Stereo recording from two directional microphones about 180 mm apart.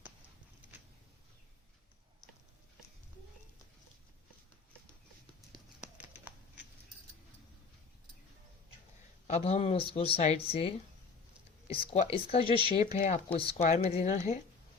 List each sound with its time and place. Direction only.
9.2 s speech: 35° left (ahead or behind)
11.7 s speech: 30° left (ahead or behind)
13.9 s a woman's voice: 50° left (ahead or behind)